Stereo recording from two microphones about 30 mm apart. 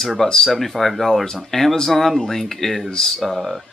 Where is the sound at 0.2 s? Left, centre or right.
Centre.